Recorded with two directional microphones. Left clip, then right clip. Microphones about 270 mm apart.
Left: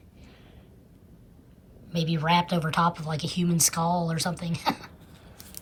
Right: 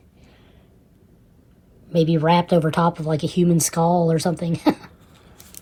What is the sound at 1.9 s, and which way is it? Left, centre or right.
Speech, centre.